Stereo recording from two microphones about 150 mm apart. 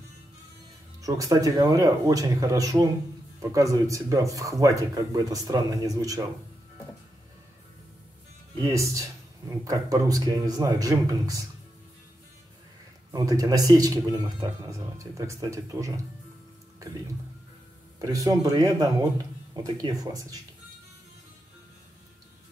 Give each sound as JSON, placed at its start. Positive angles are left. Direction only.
{"t": 1.0, "sound": "speech", "side_deg": -25}
{"t": 8.6, "sound": "speech", "side_deg": -20}
{"t": 13.1, "sound": "speech", "side_deg": -25}
{"t": 17.9, "sound": "speech", "side_deg": -25}